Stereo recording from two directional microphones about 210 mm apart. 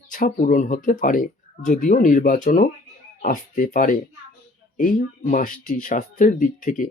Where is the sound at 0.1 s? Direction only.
40° left (ahead or behind).